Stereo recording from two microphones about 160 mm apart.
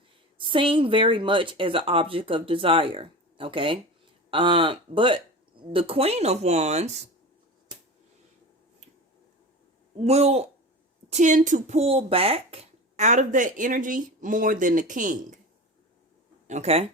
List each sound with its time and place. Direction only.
0.3 s speech: 30° right (ahead or behind)
10.0 s speech: 40° right (ahead or behind)
16.5 s speech: 45° right (ahead or behind)